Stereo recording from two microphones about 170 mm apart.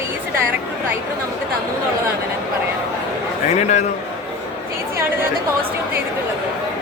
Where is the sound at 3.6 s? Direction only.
45° left (ahead or behind).